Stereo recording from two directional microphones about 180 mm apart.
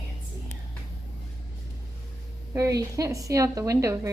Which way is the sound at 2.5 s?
20° right (ahead or behind).